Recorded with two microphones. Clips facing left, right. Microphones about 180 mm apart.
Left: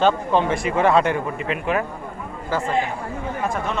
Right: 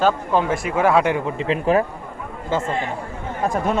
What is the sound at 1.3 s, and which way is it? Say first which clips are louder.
Speech: right 5 dB; 30° right (ahead or behind).